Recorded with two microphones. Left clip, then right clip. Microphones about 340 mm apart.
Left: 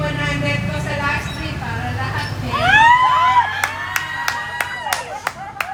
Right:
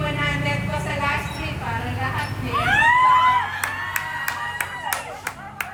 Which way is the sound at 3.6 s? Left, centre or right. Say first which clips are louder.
Left 4 dB; centre.